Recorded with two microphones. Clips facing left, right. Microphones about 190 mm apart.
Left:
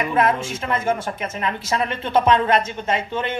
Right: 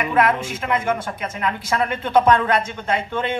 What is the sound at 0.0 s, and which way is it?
Speech, 25° left (ahead or behind).